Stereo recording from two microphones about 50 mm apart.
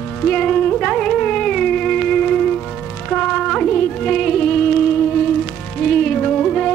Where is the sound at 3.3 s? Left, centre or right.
Centre.